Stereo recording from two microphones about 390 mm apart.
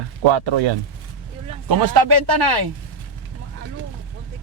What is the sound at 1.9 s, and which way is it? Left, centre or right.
Speech, right.